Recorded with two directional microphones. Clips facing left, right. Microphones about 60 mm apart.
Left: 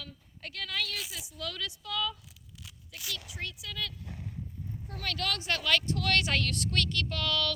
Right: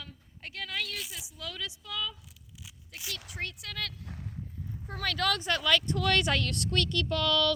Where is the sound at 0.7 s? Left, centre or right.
Centre.